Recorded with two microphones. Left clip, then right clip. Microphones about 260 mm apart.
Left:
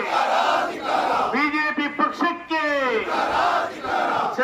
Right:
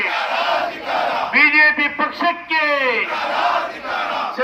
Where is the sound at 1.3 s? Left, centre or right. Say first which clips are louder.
Right 9 dB; centre.